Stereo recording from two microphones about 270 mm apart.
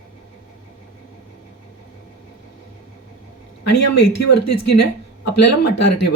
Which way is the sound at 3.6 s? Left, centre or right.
Left.